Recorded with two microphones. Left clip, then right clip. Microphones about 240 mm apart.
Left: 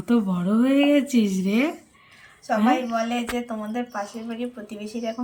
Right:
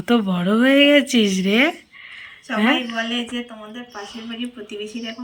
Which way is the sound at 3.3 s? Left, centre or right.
Left.